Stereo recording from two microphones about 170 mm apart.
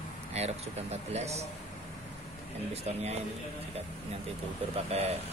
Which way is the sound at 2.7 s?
40° right (ahead or behind).